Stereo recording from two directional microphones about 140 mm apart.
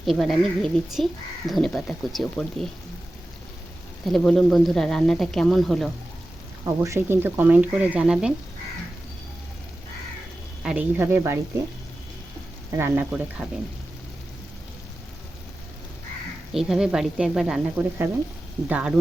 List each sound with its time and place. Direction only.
0.0 s speech: centre (ahead or behind)
4.0 s speech: centre (ahead or behind)
6.8 s speech: 20° right (ahead or behind)
10.6 s speech: 10° right (ahead or behind)
12.7 s speech: 15° right (ahead or behind)
16.5 s speech: 5° right (ahead or behind)
17.7 s speech: 15° right (ahead or behind)